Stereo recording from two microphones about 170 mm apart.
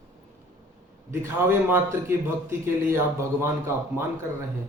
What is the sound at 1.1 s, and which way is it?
A man's voice, 15° right (ahead or behind).